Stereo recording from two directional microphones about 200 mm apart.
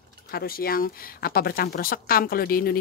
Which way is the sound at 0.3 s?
50° left (ahead or behind).